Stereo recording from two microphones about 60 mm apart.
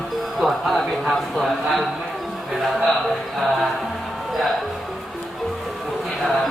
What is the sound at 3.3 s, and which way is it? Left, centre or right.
Speech, centre.